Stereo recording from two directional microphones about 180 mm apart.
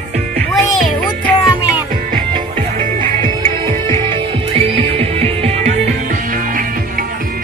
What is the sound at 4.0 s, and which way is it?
Music, 30° right (ahead or behind).